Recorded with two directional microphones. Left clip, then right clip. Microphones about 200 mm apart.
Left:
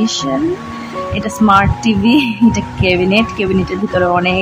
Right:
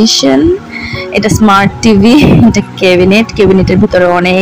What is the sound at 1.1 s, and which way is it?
A woman's voice, 25° right (ahead or behind).